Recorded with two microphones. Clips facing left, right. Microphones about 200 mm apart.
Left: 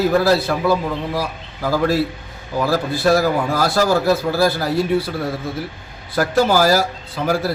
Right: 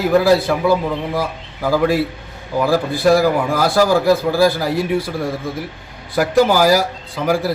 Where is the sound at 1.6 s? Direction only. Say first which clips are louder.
Right 2 dB; 15° right (ahead or behind).